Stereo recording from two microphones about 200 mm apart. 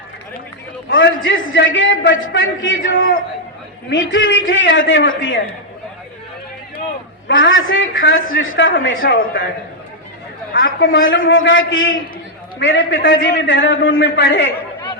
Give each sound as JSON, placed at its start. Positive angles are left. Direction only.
{"t": 0.9, "sound": "a man's voice", "side_deg": 70}
{"t": 3.8, "sound": "a man's voice", "side_deg": 65}
{"t": 7.3, "sound": "a man's voice", "side_deg": 70}
{"t": 9.0, "sound": "speech", "side_deg": 45}
{"t": 10.5, "sound": "a woman's voice", "side_deg": 65}